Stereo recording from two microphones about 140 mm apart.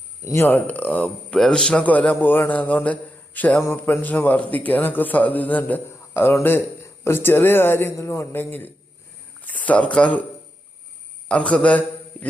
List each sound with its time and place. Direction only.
0.3 s speech: 15° left (ahead or behind)
11.3 s speech: 5° left (ahead or behind)